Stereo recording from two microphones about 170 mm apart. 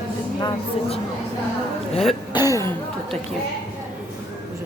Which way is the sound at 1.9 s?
35° left (ahead or behind).